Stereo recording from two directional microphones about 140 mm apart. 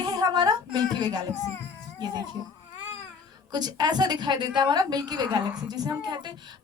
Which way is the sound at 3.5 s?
30° right (ahead or behind).